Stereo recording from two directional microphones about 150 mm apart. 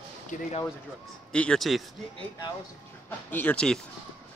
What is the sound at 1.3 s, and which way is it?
Speech, 5° left (ahead or behind).